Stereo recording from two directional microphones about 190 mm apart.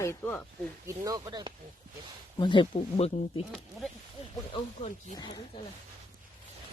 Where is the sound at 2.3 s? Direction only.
25° left (ahead or behind).